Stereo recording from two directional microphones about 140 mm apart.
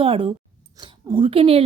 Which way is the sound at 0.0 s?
40° right (ahead or behind).